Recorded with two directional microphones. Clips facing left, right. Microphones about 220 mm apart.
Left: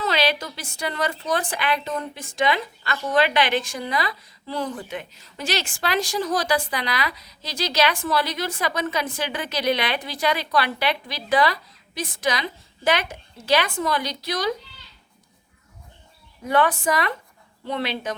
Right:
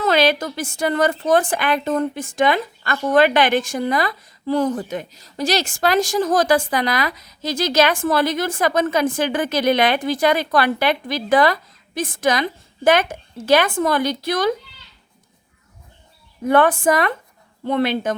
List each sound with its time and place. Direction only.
0.0 s a woman's voice: 50° right (ahead or behind)
16.5 s a woman's voice: 50° right (ahead or behind)